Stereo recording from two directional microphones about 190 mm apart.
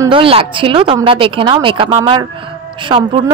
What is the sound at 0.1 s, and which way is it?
Speech, 30° right (ahead or behind).